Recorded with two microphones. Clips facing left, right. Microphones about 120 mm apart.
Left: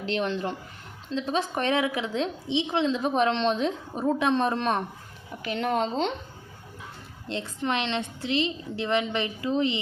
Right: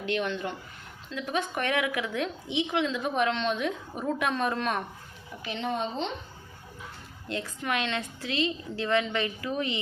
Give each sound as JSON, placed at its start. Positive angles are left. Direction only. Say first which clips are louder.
{"t": 0.0, "sound": "a woman's voice", "louder": "left 2 dB", "side_deg": 35}
{"t": 5.4, "sound": "a woman's voice", "louder": "left 5 dB", "side_deg": 60}
{"t": 7.3, "sound": "a woman's voice", "louder": "left 3 dB", "side_deg": 25}